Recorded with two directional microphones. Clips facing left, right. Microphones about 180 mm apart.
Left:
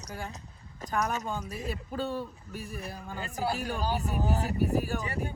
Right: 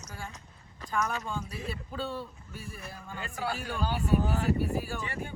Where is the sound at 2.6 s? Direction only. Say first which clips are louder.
Left 3 dB; 35° left (ahead or behind).